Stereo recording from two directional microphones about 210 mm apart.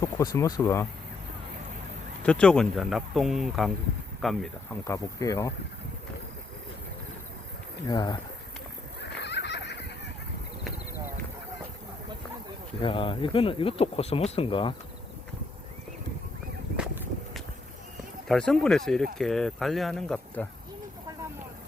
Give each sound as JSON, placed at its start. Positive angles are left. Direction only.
{"t": 0.0, "sound": "speech", "side_deg": 15}
{"t": 2.2, "sound": "speech", "side_deg": 5}
{"t": 4.9, "sound": "speech", "side_deg": 15}
{"t": 7.9, "sound": "speech", "side_deg": 20}
{"t": 9.0, "sound": "fowl", "side_deg": 55}
{"t": 12.8, "sound": "speech", "side_deg": 25}
{"t": 16.7, "sound": "a sound", "side_deg": -5}
{"t": 18.3, "sound": "speech", "side_deg": 0}